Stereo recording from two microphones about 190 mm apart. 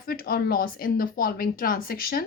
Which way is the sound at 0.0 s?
50° left (ahead or behind).